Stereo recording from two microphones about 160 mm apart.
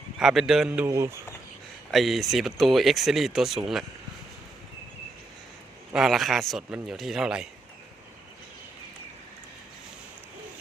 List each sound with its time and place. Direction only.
0.2 s speech: 5° right (ahead or behind)
0.9 s speech: 20° right (ahead or behind)
1.9 s speech: centre (ahead or behind)
5.9 s speech: centre (ahead or behind)